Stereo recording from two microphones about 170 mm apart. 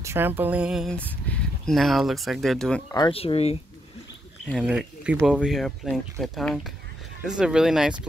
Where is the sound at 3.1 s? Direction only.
35° left (ahead or behind).